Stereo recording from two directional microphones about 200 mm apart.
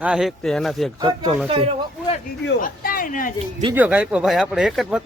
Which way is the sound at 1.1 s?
20° right (ahead or behind).